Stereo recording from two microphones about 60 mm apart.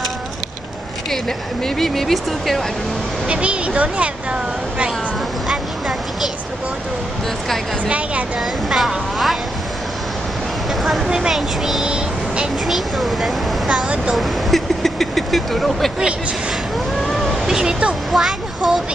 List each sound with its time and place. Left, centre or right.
1.1 s speech: centre
3.3 s speech: centre
5.5 s a sound: centre
8.4 s speech: centre
11.1 s speech: centre
11.8 s vehicle: centre
12.6 s speech: centre
13.7 s speech: centre
14.1 s speech: centre
17.0 s vehicle: centre
17.3 s speech: centre